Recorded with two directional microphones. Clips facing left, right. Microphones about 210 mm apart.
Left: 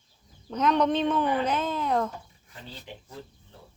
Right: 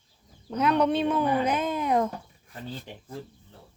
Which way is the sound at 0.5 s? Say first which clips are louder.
Even; 10° right (ahead or behind).